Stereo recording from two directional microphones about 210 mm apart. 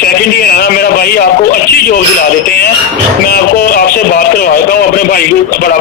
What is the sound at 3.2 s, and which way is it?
A man's voice, 45° left (ahead or behind).